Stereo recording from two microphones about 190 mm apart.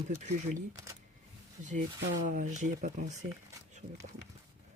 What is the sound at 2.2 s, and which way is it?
Speech, 45° right (ahead or behind).